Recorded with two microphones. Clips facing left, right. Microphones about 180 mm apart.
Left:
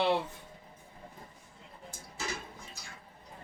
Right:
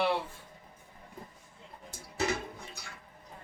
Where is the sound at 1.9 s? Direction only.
65° right (ahead or behind).